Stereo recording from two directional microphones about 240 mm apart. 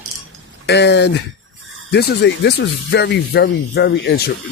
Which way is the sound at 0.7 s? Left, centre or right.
Left.